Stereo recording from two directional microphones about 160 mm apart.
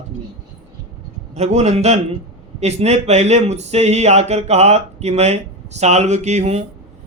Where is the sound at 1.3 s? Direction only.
45° right (ahead or behind).